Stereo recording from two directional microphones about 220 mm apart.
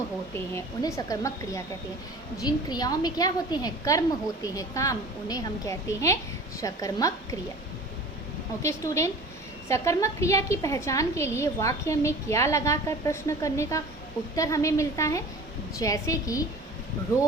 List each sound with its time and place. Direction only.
0.3 s a woman's voice: 15° left (ahead or behind)
8.6 s a woman's voice: 15° left (ahead or behind)